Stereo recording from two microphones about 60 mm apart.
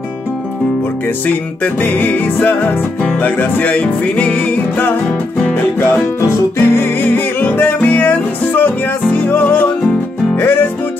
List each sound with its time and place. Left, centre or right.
1.0 s music: left